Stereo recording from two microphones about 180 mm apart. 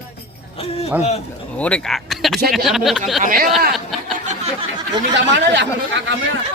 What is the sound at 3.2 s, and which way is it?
Speech, 50° right (ahead or behind).